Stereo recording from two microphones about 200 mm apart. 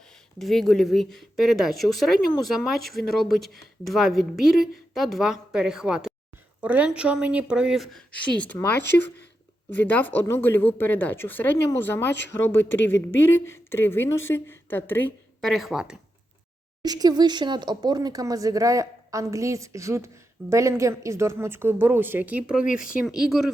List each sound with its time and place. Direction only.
0.0 s speech: centre (ahead or behind)
9.8 s speech: 10° left (ahead or behind)
12.6 s a woman's voice: 65° left (ahead or behind)
13.3 s speech: 10° left (ahead or behind); by 16.0 s 5° right (ahead or behind)
16.8 s speech: 20° right (ahead or behind); by 23.5 s centre (ahead or behind)